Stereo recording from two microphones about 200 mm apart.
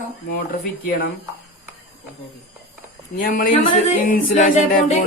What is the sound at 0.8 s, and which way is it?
Speech, 50° left (ahead or behind).